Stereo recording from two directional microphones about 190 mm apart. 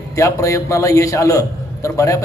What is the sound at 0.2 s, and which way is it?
A man's voice, 15° left (ahead or behind).